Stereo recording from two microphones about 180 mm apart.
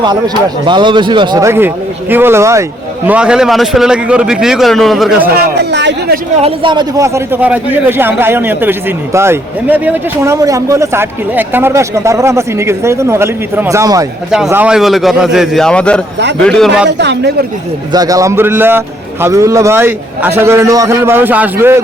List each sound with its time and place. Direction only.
0.6 s a man's voice: 25° right (ahead or behind)
3.1 s a man's voice: 5° right (ahead or behind)
5.7 s speech: 75° right (ahead or behind)
6.3 s a man's voice: 30° right (ahead or behind)
14.3 s a man's voice: 5° right (ahead or behind)
17.0 s speech: 75° right (ahead or behind)
17.9 s a man's voice: 20° right (ahead or behind)